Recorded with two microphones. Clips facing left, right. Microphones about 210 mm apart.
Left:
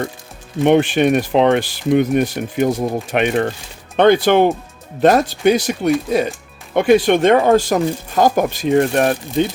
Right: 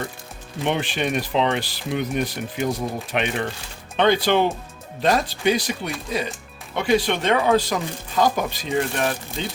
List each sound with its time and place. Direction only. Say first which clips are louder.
0.6 s speech: left 11 dB; 50° left (ahead or behind)